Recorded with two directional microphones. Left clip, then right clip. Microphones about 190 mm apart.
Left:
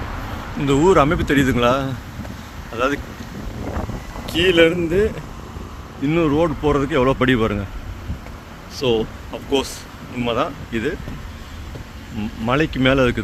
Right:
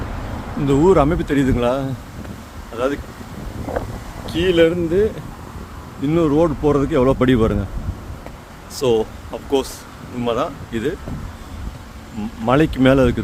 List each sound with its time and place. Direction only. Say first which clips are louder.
0.6 s speech: even; 10° right (ahead or behind)
4.3 s speech: left 1 dB; centre (ahead or behind)
6.1 s speech: right 2 dB; 15° right (ahead or behind)
8.8 s speech: right 2 dB; 35° right (ahead or behind)
9.3 s speech: right 1 dB; 15° right (ahead or behind)
12.5 s speech: right 3 dB; 30° right (ahead or behind)